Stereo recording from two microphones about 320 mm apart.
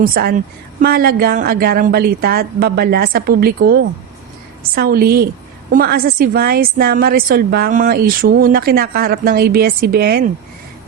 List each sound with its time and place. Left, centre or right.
0.0 s a woman's voice: right